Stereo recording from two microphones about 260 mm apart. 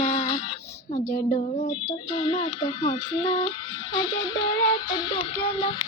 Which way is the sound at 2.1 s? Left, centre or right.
Centre.